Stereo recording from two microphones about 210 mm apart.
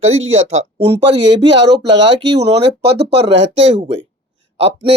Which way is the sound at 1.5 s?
55° right (ahead or behind).